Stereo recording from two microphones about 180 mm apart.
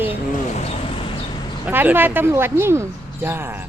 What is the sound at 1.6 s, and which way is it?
Speech, 10° right (ahead or behind).